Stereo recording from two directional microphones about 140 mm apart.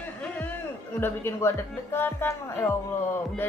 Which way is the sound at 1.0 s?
15° left (ahead or behind).